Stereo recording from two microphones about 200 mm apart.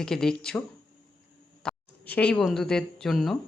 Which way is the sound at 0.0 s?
5° left (ahead or behind).